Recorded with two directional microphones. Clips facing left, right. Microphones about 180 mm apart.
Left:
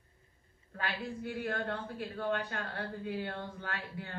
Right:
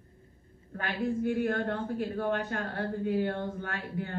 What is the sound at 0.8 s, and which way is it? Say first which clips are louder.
A man's voice: right 8 dB; 45° right (ahead or behind).